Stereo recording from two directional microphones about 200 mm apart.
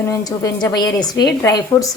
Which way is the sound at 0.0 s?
15° left (ahead or behind).